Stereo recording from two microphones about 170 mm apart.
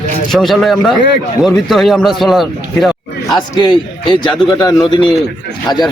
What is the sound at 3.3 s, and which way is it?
A man's voice, 25° left (ahead or behind).